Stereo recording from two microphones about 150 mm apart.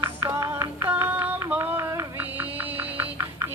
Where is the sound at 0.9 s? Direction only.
15° right (ahead or behind).